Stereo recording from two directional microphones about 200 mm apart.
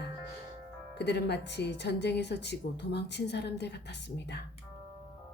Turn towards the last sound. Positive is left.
turn(degrees=55)  # may be behind; listen again after turning